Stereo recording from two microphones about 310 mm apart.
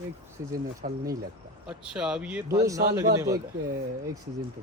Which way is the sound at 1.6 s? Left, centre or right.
Centre.